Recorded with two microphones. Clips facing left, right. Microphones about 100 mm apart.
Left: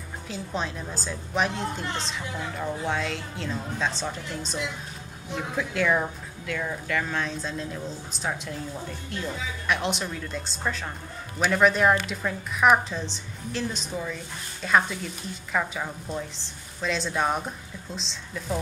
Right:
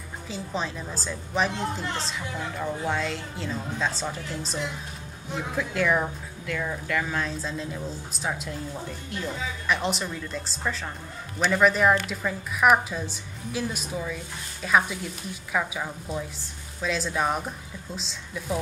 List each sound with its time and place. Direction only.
0.3 s a woman's voice: centre (ahead or behind)